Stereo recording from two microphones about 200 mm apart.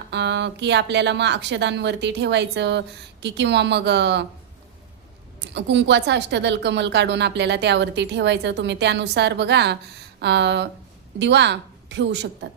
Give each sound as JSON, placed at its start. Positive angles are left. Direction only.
{"t": 0.1, "sound": "a woman's voice", "side_deg": -60}
{"t": 5.5, "sound": "a woman's voice", "side_deg": -60}